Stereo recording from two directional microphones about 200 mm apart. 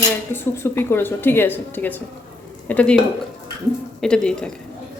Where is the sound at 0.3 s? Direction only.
10° left (ahead or behind).